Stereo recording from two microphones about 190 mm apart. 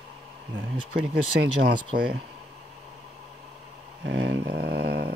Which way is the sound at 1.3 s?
60° right (ahead or behind).